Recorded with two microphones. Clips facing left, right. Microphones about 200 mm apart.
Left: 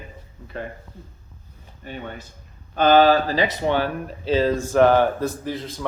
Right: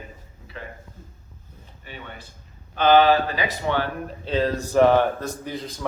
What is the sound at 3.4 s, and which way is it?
Speech, 20° left (ahead or behind).